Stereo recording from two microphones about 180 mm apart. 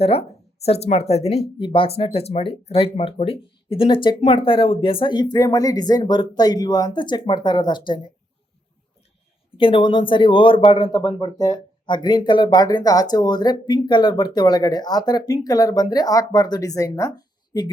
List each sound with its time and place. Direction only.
0.0 s speech: 35° left (ahead or behind)
9.6 s speech: 30° left (ahead or behind)